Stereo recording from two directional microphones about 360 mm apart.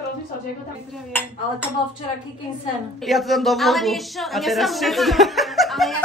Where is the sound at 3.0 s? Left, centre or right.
Centre.